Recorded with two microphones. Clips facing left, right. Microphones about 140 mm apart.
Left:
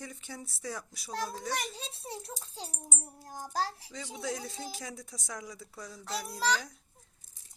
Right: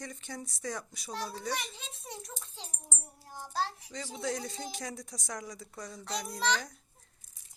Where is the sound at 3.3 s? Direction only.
45° left (ahead or behind).